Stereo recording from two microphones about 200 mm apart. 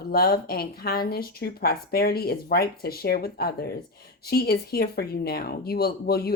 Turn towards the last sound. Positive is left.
turn(degrees=50)  # may be behind; listen again after turning